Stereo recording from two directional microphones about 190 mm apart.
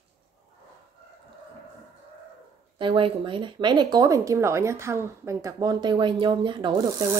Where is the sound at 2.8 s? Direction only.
25° right (ahead or behind).